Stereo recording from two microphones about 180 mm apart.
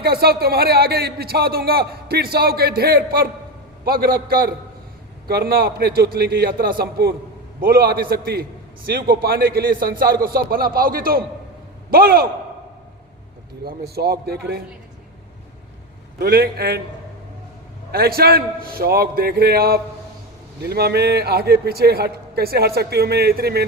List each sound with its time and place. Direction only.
0.0 s a man's voice: 60° right (ahead or behind)
13.7 s a man's voice: 60° right (ahead or behind)
16.1 s a man's voice: 60° right (ahead or behind)
17.9 s a man's voice: 60° right (ahead or behind)